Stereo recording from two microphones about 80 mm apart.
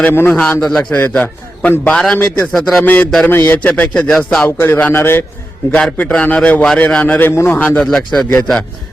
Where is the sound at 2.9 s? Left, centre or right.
Left; by 4.5 s centre.